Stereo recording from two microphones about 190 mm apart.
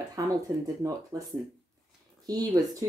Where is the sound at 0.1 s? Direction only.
20° right (ahead or behind).